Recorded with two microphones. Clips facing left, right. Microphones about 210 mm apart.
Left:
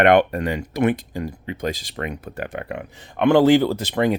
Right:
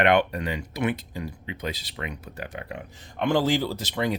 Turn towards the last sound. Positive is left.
turn(degrees=55)  # may be behind; listen again after turning